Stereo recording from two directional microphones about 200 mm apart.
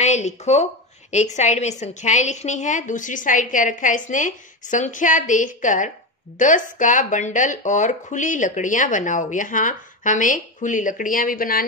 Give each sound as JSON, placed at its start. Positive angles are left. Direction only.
{"t": 0.0, "sound": "speech", "side_deg": 35}